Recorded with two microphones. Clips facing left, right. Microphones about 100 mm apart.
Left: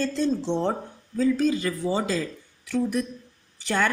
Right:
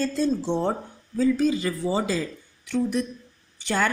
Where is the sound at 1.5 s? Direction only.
15° right (ahead or behind).